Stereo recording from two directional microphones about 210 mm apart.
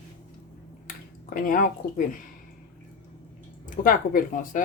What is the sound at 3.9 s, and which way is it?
Speech, 40° left (ahead or behind).